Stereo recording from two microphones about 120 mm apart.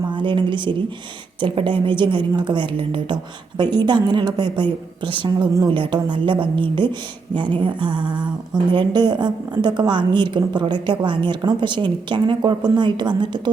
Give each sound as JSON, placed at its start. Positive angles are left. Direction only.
{"t": 0.0, "sound": "a woman's voice", "side_deg": -40}